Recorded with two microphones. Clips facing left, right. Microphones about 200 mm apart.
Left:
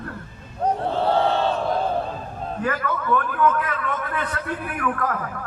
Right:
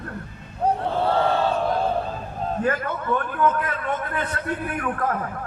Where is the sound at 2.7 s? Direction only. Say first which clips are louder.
Left 5 dB; 25° right (ahead or behind).